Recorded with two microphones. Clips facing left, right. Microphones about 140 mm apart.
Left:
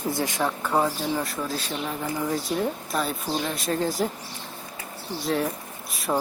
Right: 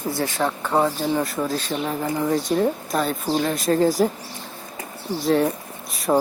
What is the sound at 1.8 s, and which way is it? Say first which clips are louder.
Speech: right 5 dB; 30° right (ahead or behind).